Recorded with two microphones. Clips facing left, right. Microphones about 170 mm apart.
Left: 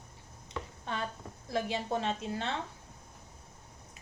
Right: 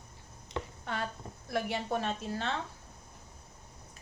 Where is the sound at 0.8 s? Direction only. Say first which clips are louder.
Left 3 dB; 20° left (ahead or behind).